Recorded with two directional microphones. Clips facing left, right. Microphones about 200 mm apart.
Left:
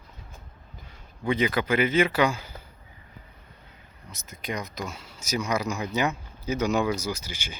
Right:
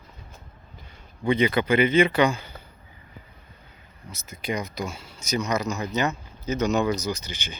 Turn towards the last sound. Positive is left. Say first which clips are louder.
# right 2 dB
turn(degrees=5)  # may be behind; listen again after turning